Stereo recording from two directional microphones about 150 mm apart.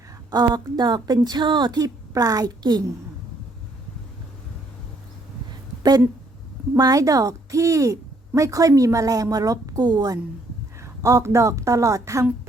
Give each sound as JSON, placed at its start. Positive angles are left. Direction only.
{"t": 0.3, "sound": "speech", "side_deg": -30}
{"t": 5.8, "sound": "speech", "side_deg": -25}